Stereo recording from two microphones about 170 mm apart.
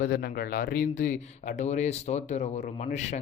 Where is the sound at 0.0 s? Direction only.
70° left (ahead or behind).